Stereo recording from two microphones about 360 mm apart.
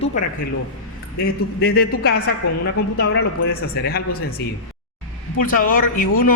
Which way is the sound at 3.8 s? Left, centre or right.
Left.